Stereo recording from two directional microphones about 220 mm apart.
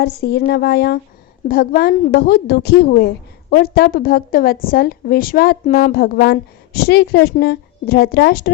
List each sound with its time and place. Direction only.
0.0 s a woman's voice: 45° left (ahead or behind)